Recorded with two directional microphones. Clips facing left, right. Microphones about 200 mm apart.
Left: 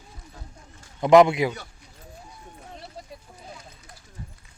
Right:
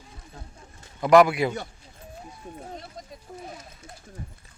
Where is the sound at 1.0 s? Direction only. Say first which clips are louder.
Left 2 dB; 20° left (ahead or behind).